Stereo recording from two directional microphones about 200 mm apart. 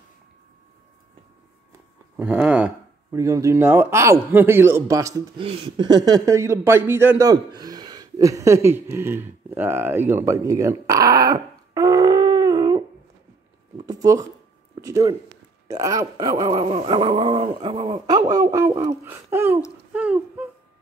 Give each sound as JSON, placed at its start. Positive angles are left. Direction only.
{"t": 2.1, "sound": "speech", "side_deg": -5}
{"t": 5.4, "sound": "speech", "side_deg": -25}
{"t": 8.6, "sound": "a sound", "side_deg": -10}
{"t": 13.8, "sound": "a sound", "side_deg": -15}
{"t": 14.8, "sound": "speech", "side_deg": -15}
{"t": 19.9, "sound": "humming", "side_deg": -5}